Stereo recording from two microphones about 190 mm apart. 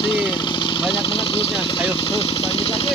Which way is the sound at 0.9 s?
30° left (ahead or behind).